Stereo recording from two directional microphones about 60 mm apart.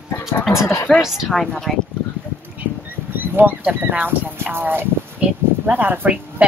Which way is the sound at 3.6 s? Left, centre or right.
Right.